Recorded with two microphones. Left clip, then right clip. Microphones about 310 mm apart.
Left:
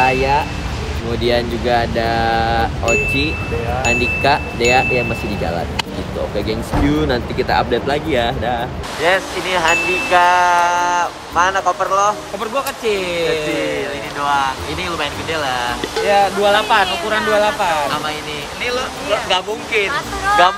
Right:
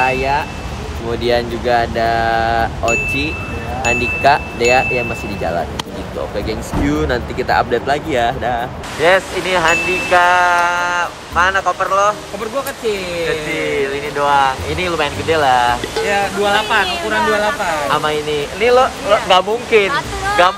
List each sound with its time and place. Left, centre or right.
0.0 s vehicle: centre
1.2 s speech: centre
6.3 s speech: centre
9.0 s speech: centre
13.7 s speech: centre
16.1 s speech: left
17.9 s speech: centre